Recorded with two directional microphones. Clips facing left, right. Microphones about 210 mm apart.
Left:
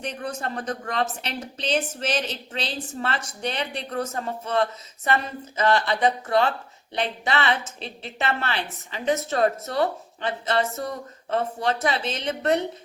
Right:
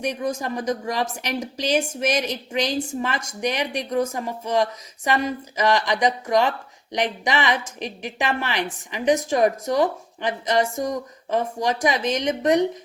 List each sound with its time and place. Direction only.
0.0 s speech: 10° right (ahead or behind)